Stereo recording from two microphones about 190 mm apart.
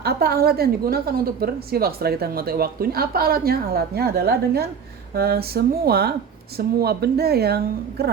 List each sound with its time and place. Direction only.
0.0 s a woman's voice: 55° right (ahead or behind)